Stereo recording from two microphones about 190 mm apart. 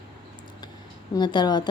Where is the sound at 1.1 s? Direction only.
25° left (ahead or behind).